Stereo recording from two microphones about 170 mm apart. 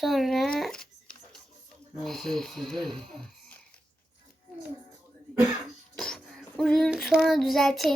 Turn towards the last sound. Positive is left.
turn(degrees=0)  # may be behind; listen again after turning